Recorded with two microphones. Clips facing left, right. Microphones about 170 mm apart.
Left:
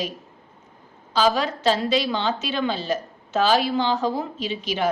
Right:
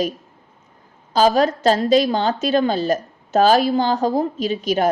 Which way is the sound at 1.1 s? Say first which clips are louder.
Right 5 dB; 45° right (ahead or behind).